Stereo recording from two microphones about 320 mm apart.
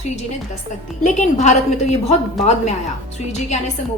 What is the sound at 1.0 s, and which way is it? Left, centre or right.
Speech, left.